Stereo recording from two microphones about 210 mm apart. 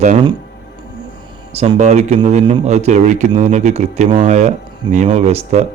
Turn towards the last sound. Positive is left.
turn(degrees=-30)  # may be behind; listen again after turning